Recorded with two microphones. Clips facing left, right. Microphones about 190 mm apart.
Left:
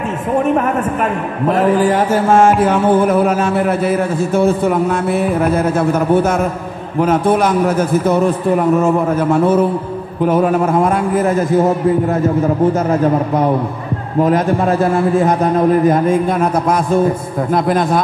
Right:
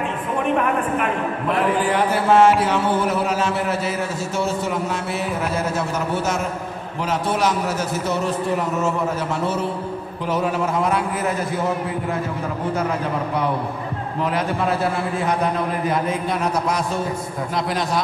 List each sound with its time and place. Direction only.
1.5 s mantra: 40° left (ahead or behind)